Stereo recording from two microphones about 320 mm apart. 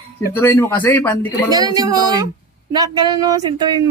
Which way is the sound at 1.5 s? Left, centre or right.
Centre.